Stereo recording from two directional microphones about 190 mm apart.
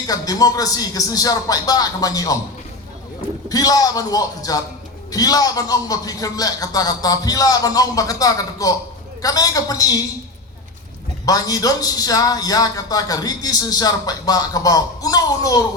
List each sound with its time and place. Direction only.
0.1 s speech: 20° left (ahead or behind)
3.5 s speech: 20° left (ahead or behind)
11.3 s speech: 20° left (ahead or behind)